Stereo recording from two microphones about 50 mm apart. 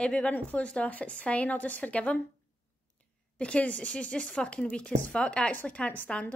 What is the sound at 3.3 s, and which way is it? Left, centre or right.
A woman's voice, left.